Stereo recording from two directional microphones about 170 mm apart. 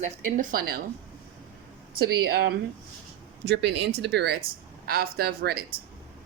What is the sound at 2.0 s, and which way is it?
Speech, 65° right (ahead or behind).